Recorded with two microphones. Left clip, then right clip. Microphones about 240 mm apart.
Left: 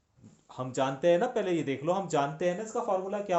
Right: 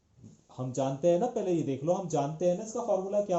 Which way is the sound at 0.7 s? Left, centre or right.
Left.